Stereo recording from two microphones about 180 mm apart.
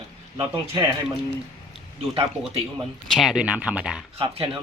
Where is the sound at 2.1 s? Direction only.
35° right (ahead or behind).